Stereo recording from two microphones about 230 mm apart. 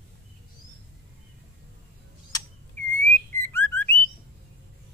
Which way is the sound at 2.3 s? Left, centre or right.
Centre.